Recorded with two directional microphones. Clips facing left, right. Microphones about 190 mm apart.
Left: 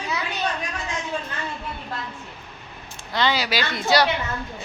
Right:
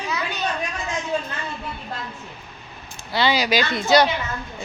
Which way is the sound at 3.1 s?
10° right (ahead or behind).